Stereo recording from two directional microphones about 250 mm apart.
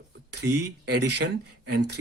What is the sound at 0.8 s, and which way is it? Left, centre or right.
Speech, right.